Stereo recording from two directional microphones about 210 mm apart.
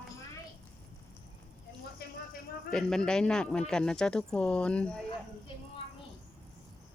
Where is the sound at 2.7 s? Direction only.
5° left (ahead or behind).